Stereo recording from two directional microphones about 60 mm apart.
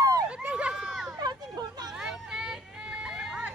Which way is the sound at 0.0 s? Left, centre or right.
Right.